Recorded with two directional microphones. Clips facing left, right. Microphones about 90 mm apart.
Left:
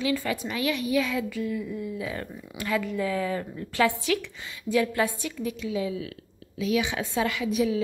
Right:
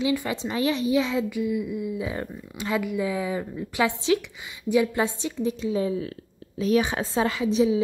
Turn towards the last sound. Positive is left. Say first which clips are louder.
# right 4 dB
turn(degrees=-25)  # may be behind; listen again after turning